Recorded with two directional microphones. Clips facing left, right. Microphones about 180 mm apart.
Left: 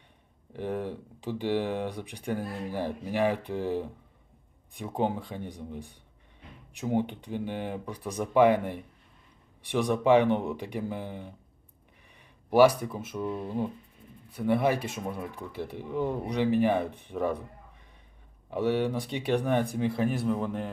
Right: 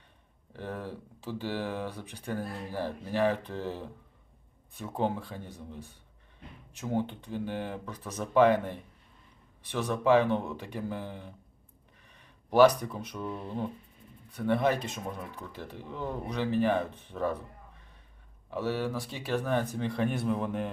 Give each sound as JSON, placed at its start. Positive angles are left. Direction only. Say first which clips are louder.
{"t": 0.5, "sound": "speech", "louder": "left 6 dB", "side_deg": 15}
{"t": 18.5, "sound": "speech", "louder": "left 4 dB", "side_deg": 20}